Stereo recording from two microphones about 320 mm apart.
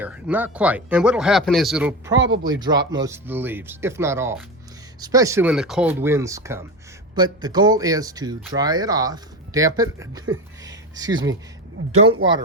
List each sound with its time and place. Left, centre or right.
0.0 s speech: centre
2.1 s speech: right
2.4 s speech: centre